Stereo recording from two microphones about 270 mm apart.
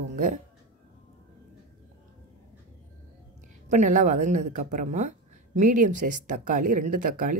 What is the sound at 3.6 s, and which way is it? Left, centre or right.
A woman's voice, right.